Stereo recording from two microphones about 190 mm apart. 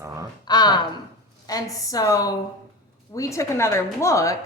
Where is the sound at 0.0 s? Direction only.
15° right (ahead or behind).